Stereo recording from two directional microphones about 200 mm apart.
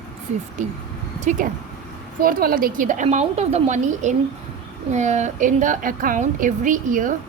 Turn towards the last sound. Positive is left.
turn(degrees=-40)  # may be behind; listen again after turning